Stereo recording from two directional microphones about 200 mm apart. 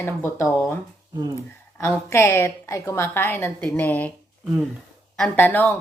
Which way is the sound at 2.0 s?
15° left (ahead or behind).